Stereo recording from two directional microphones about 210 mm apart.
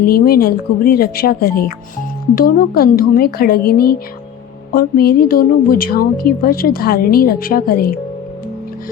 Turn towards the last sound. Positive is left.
turn(degrees=45)  # may be behind; listen again after turning